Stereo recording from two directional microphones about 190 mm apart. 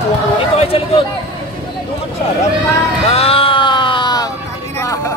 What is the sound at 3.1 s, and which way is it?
Music, 30° left (ahead or behind).